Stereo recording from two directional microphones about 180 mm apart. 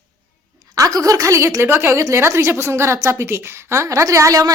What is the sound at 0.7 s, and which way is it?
A woman's voice, 20° right (ahead or behind).